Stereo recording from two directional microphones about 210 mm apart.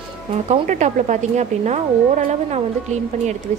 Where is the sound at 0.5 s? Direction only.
35° right (ahead or behind).